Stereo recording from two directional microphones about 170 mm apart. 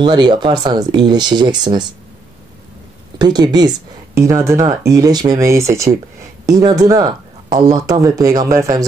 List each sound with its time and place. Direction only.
0.0 s speech: 25° right (ahead or behind)
3.2 s speech: 25° right (ahead or behind)